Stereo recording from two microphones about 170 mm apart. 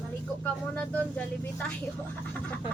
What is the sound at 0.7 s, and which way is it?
Speech, 5° left (ahead or behind).